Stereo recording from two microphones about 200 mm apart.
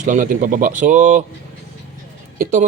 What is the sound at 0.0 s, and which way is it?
Speech, 40° right (ahead or behind).